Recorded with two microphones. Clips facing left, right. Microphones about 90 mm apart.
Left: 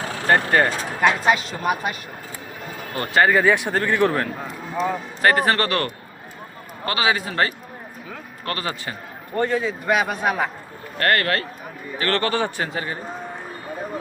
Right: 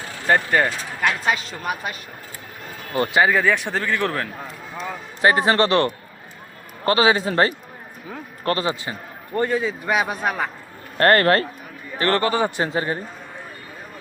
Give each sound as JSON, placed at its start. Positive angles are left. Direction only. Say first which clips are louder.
{"t": 0.3, "sound": "speech", "louder": "left 1 dB", "side_deg": 5}
{"t": 1.0, "sound": "speech", "louder": "left 4 dB", "side_deg": 20}
{"t": 2.9, "sound": "speech", "louder": "right 7 dB", "side_deg": -20}
{"t": 3.2, "sound": "speech", "louder": "left 2 dB", "side_deg": 0}
{"t": 3.4, "sound": "speech", "louder": "left 2 dB", "side_deg": 10}
{"t": 5.2, "sound": "a man's voice", "louder": "right 2 dB", "side_deg": -20}
{"t": 9.8, "sound": "speech", "louder": "left 1 dB", "side_deg": 0}
{"t": 10.9, "sound": "a man's voice", "louder": "right 5 dB", "side_deg": -35}
{"t": 12.0, "sound": "a man's voice", "louder": "right 2 dB", "side_deg": -15}
{"t": 12.6, "sound": "a man's voice", "louder": "right 4 dB", "side_deg": -30}